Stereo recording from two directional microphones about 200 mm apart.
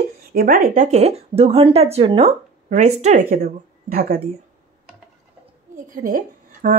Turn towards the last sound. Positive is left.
turn(degrees=-45)  # may be behind; listen again after turning